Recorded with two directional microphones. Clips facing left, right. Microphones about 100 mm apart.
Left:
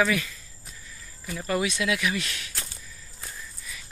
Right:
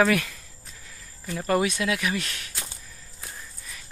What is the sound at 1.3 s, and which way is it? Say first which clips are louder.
Speech: right 3 dB; 45° right (ahead or behind).